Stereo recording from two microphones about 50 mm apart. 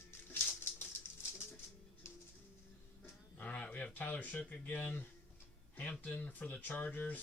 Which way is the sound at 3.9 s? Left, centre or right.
Left.